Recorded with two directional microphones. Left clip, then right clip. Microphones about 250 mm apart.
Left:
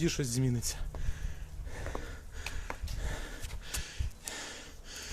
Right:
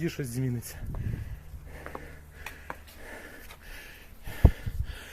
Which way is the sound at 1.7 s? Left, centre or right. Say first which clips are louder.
Even; centre.